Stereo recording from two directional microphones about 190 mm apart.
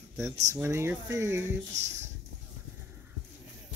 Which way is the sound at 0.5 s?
15° right (ahead or behind).